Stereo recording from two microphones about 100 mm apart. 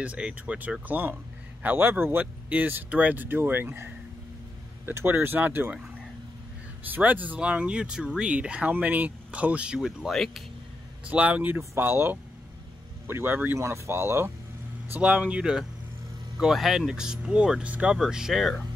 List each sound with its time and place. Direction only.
0.0 s speech: 10° right (ahead or behind)
6.9 s speech: 15° right (ahead or behind); by 10.4 s centre (ahead or behind)
11.1 s speech: 15° right (ahead or behind)
14.9 s speech: 15° right (ahead or behind)